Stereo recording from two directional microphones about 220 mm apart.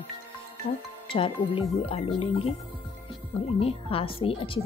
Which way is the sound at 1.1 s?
25° left (ahead or behind).